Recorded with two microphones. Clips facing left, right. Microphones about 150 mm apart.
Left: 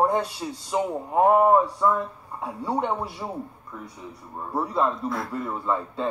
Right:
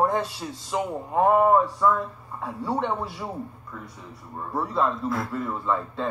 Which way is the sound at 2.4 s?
Centre (ahead or behind).